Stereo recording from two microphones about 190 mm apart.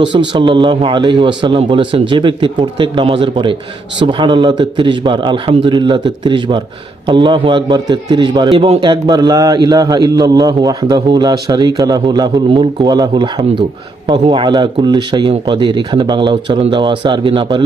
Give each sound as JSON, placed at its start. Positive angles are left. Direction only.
{"t": 0.3, "sound": "a man's voice", "side_deg": -25}